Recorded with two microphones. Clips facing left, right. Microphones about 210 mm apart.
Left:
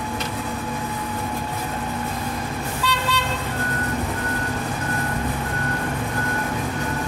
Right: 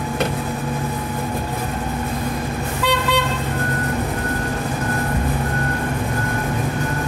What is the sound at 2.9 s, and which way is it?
Vehicle, 60° right (ahead or behind).